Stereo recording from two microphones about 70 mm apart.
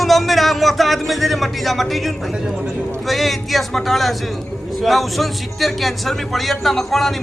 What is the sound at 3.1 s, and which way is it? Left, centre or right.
A man's voice, centre.